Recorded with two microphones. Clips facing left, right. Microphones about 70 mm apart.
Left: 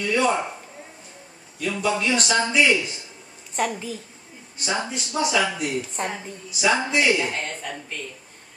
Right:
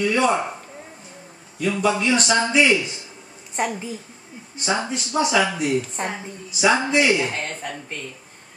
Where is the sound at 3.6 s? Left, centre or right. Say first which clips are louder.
Even; right.